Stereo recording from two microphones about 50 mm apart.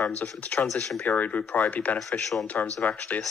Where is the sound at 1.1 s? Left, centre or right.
Left.